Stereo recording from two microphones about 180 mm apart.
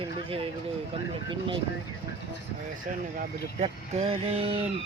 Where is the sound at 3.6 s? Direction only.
35° right (ahead or behind).